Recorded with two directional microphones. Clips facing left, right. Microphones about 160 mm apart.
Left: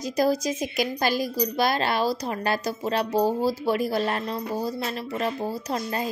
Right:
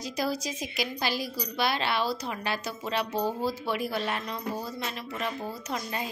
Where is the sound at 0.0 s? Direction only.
45° left (ahead or behind).